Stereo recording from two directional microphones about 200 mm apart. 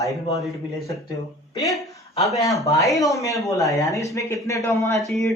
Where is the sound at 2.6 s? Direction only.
15° left (ahead or behind).